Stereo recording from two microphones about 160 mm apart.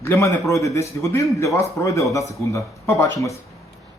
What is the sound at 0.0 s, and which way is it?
A man's voice, 15° left (ahead or behind).